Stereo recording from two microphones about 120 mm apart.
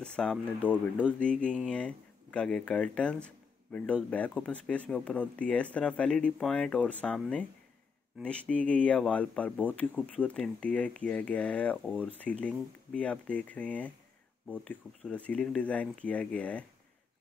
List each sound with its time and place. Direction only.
0.0 s speech: 5° left (ahead or behind)
8.2 s speech: 10° left (ahead or behind)